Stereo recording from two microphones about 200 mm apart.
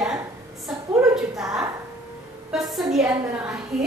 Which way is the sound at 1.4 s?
5° right (ahead or behind).